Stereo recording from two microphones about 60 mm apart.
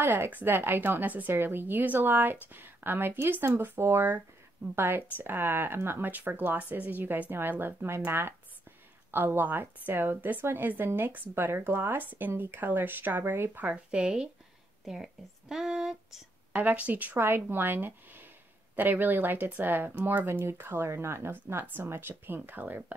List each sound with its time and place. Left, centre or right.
0.0 s speech: right
13.7 s speech: centre
16.5 s speech: right
20.4 s speech: right